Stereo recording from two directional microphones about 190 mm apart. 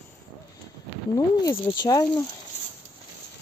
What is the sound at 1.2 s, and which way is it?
Speech, 20° left (ahead or behind).